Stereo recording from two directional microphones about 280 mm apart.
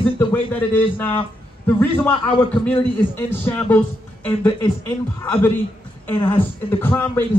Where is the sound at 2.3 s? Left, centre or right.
Centre.